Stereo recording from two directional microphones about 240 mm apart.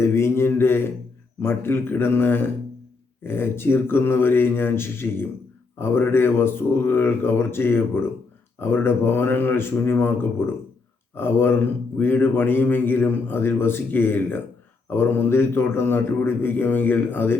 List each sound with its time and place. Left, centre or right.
0.0 s a man's voice: centre